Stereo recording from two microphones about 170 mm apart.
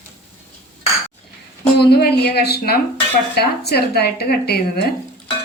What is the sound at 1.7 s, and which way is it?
A woman's voice, 70° left (ahead or behind).